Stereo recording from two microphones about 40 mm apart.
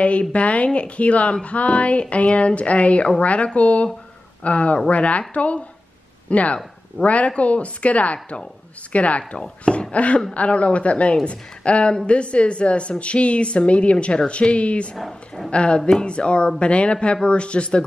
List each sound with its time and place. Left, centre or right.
0.0 s speech: left
9.4 s speech: left
9.9 s speech: left
15.0 s a woman's voice: centre
15.5 s speech: left
15.8 s speech: centre
16.1 s speech: left